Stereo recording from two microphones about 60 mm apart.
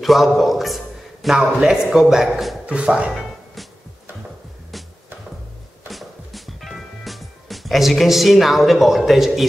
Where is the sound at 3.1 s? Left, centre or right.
Centre.